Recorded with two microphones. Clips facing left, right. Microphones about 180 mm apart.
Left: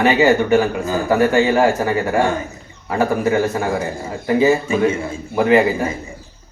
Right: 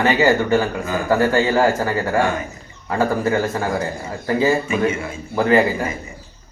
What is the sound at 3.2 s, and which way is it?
Speech, 15° left (ahead or behind).